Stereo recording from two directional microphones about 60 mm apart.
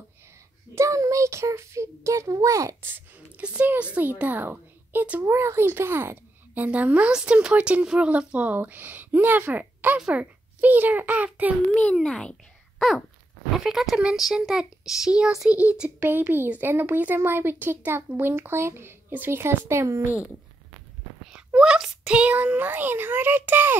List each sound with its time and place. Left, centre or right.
0.7 s a child's voice: right
3.3 s a sound: right
3.9 s speech: right
5.2 s speech: right
6.5 s speech: right
9.9 s speech: centre
10.6 s speech: right
11.7 s a child's voice: centre
13.7 s speech: centre; by 15.9 s right
16.0 s speech: right
21.5 s speech: centre
22.1 s speech: right